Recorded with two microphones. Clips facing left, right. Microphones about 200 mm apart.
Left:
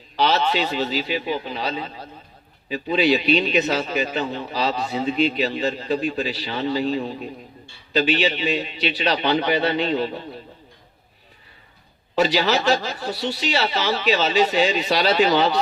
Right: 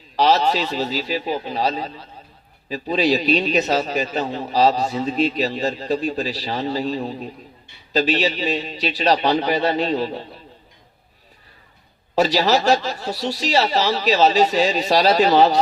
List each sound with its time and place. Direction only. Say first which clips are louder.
0.2 s a man's voice: right 3 dB; 40° right (ahead or behind)
12.1 s a man's voice: right 2 dB; 40° right (ahead or behind)